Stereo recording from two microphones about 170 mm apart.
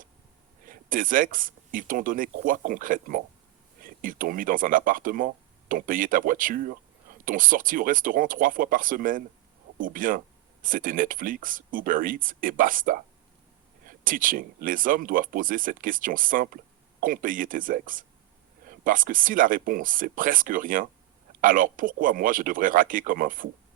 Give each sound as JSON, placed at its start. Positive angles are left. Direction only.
{"t": 0.7, "sound": "speech", "side_deg": -55}